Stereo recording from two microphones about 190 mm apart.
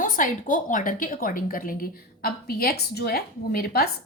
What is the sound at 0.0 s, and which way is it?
A woman's voice, 45° left (ahead or behind).